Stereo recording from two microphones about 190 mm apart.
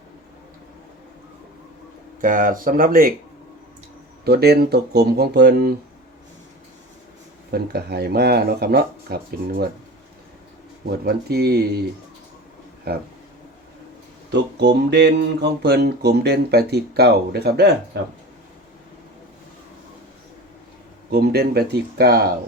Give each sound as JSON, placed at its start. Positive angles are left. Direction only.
{"t": 2.2, "sound": "speech", "side_deg": -45}
{"t": 4.2, "sound": "mantra", "side_deg": -55}
{"t": 7.5, "sound": "mantra", "side_deg": -55}
{"t": 10.8, "sound": "mantra", "side_deg": -55}
{"t": 12.9, "sound": "mantra", "side_deg": -55}
{"t": 14.3, "sound": "mantra", "side_deg": -65}
{"t": 21.1, "sound": "mantra", "side_deg": -55}